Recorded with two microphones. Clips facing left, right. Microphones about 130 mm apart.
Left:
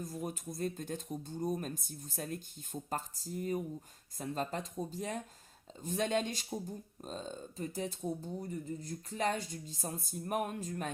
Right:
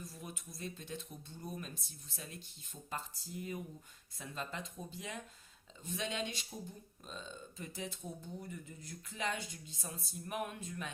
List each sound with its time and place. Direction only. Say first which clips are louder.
0.0 s speech: left 9 dB; 45° left (ahead or behind)